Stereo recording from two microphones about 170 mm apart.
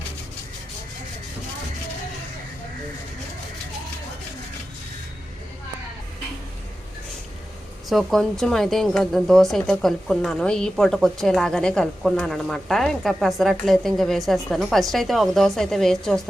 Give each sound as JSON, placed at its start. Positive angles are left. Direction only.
{"t": 7.9, "sound": "speech", "side_deg": 0}